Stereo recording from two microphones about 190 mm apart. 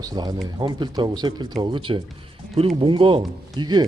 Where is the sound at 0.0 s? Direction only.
20° right (ahead or behind).